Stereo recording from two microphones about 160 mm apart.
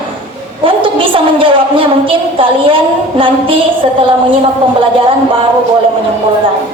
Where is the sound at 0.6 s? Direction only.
35° right (ahead or behind).